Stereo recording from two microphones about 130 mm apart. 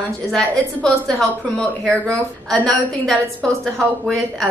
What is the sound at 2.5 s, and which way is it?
A woman's voice, centre (ahead or behind).